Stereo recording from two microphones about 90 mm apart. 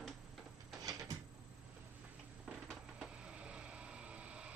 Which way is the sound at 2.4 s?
10° right (ahead or behind).